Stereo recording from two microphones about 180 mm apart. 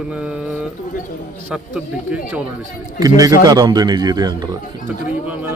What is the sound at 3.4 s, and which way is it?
A man's voice, 20° right (ahead or behind).